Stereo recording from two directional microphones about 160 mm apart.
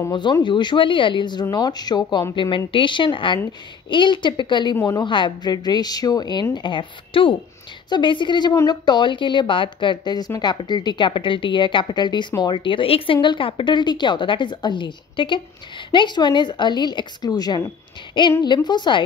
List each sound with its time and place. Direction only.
0.1 s a woman's voice: 30° left (ahead or behind)